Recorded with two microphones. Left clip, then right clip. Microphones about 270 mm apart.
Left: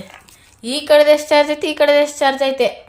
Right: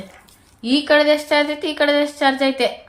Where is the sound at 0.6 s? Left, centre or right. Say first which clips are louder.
Left 3 dB; left.